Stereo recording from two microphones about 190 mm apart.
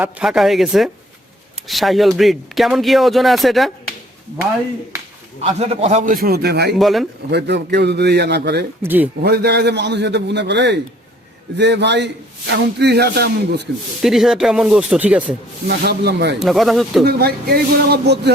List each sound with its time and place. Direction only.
0.0 s speech: 5° right (ahead or behind)
5.4 s a man's voice: 35° right (ahead or behind); by 6.7 s 60° right (ahead or behind)
6.7 s speech: centre (ahead or behind)
7.3 s a man's voice: 60° right (ahead or behind)
8.8 s speech: 10° right (ahead or behind)
9.2 s a man's voice: 60° right (ahead or behind)
14.0 s speech: centre (ahead or behind)
15.6 s a man's voice: 55° right (ahead or behind)
16.4 s speech: centre (ahead or behind)
17.1 s a man's voice: 55° right (ahead or behind)